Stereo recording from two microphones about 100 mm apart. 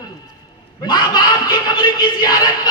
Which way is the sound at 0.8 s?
45° left (ahead or behind).